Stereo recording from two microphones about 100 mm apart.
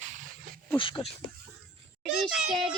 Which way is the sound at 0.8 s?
60° left (ahead or behind).